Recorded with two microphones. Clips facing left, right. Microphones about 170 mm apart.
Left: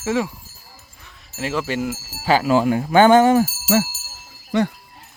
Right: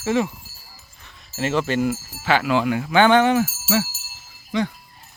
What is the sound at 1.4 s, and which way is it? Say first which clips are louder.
Speech: right 2 dB; 5° left (ahead or behind).